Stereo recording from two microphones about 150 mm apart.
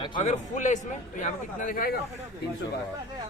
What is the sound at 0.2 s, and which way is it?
A man's voice, 55° left (ahead or behind).